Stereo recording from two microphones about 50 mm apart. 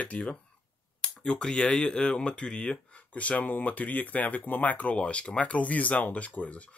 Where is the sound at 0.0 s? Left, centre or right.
Left.